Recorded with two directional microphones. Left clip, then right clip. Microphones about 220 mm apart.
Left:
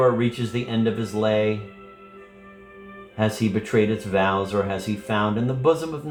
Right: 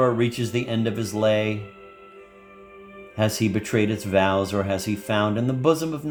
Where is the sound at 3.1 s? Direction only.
50° right (ahead or behind).